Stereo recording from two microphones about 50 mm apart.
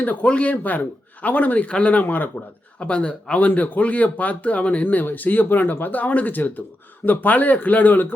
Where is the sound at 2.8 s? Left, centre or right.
Left.